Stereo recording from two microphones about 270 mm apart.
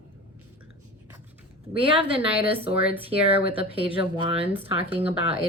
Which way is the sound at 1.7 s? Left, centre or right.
Centre.